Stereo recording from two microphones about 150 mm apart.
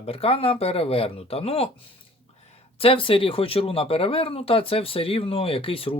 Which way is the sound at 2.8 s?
40° left (ahead or behind).